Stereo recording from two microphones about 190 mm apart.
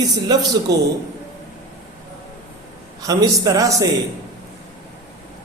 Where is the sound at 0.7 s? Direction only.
60° right (ahead or behind).